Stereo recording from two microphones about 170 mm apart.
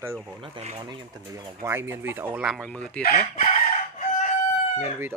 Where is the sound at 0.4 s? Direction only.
35° right (ahead or behind).